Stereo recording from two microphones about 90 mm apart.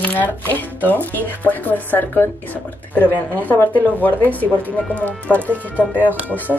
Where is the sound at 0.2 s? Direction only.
20° left (ahead or behind).